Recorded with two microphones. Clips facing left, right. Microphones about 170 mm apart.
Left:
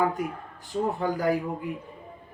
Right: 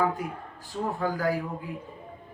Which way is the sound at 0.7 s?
20° left (ahead or behind).